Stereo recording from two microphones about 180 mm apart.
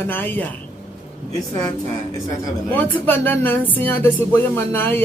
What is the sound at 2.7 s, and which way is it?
Speech, 10° left (ahead or behind).